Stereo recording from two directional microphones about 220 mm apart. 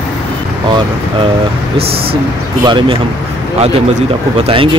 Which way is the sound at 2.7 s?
20° right (ahead or behind).